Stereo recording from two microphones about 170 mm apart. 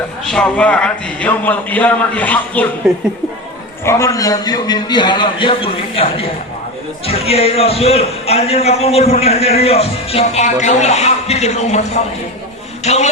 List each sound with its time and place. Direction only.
0.3 s a man's voice: 5° left (ahead or behind)
2.8 s speech: 5° right (ahead or behind)
3.8 s a man's voice: 15° left (ahead or behind); by 13.1 s 40° left (ahead or behind)